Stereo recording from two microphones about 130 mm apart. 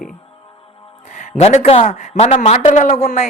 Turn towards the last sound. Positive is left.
turn(degrees=70)  # may be behind; listen again after turning